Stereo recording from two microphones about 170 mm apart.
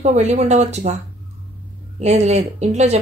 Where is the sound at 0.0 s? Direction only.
40° right (ahead or behind).